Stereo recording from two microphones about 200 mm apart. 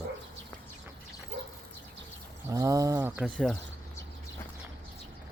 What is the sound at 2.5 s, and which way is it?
Speech, 15° right (ahead or behind).